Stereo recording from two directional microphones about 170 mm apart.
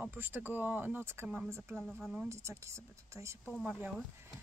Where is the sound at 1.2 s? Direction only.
5° right (ahead or behind).